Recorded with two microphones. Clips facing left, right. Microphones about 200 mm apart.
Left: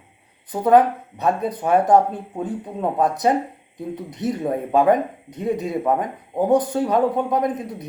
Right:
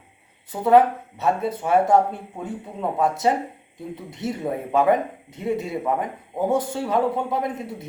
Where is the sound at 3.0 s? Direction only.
20° left (ahead or behind).